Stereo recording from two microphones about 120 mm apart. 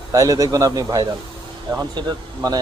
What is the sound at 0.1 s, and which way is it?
Speech, 30° right (ahead or behind).